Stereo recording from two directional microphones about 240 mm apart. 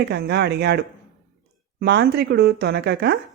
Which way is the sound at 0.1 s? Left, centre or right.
Right.